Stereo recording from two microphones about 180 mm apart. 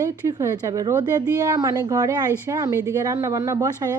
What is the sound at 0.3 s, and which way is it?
A woman's voice, 15° right (ahead or behind).